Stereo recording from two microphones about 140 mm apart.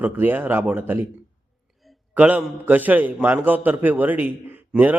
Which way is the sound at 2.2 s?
10° right (ahead or behind).